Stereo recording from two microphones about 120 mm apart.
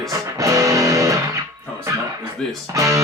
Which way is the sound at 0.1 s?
25° right (ahead or behind).